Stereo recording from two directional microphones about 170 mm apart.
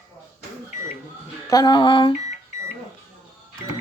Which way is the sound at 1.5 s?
25° left (ahead or behind).